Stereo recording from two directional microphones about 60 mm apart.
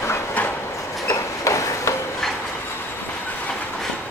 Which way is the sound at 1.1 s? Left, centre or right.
Left.